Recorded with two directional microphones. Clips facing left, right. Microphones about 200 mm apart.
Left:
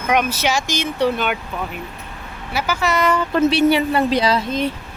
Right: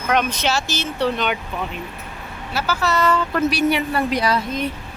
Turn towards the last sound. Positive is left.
turn(degrees=25)  # may be behind; listen again after turning